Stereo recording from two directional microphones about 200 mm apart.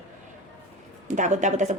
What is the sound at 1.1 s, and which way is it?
Speech, 35° right (ahead or behind).